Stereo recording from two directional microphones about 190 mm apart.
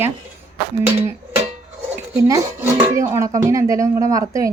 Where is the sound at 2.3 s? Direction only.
15° right (ahead or behind).